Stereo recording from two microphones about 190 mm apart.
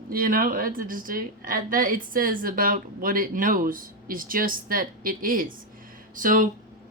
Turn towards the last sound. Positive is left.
turn(degrees=-45)  # may be behind; listen again after turning